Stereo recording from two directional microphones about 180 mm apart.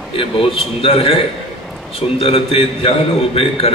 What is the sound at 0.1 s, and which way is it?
A man's voice, 30° left (ahead or behind).